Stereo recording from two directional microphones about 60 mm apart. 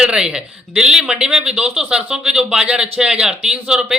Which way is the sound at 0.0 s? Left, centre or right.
Centre.